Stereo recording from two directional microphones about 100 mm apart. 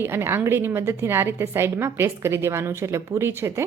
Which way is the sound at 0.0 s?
25° right (ahead or behind).